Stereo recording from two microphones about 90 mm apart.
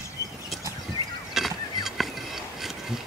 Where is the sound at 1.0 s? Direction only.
40° right (ahead or behind).